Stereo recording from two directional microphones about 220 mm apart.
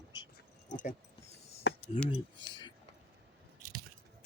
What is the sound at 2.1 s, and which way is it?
Speech, 20° left (ahead or behind).